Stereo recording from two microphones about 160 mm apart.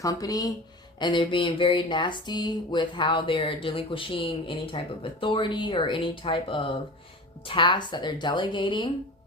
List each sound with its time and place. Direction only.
0.0 s a woman's voice: 20° left (ahead or behind)